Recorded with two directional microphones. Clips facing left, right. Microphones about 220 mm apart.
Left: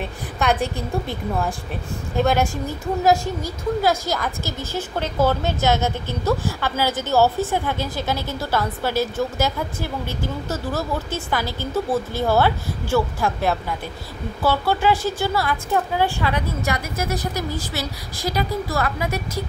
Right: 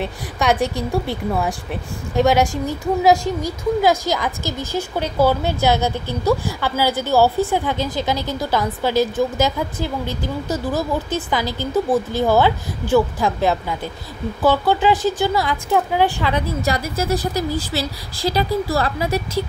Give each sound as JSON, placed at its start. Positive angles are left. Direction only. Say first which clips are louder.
{"t": 0.7, "sound": "a woman's voice", "louder": "right 4 dB", "side_deg": -10}
{"t": 14.4, "sound": "a woman's voice", "louder": "right 3 dB", "side_deg": -15}
{"t": 16.6, "sound": "speech", "louder": "right 4 dB", "side_deg": -30}